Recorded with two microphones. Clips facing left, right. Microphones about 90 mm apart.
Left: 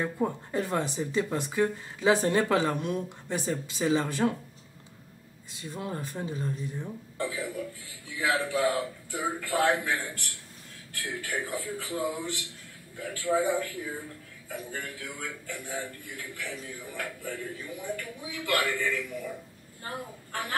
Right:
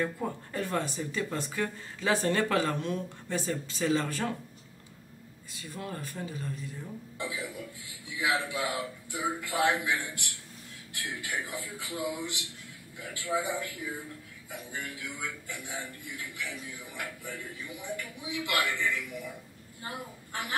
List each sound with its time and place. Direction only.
0.0 s speech: 20° left (ahead or behind)
5.6 s speech: 20° left (ahead or behind)
7.2 s a man's voice: 50° left (ahead or behind)
17.2 s a man's voice: 15° right (ahead or behind)
17.8 s a man's voice: 50° left (ahead or behind)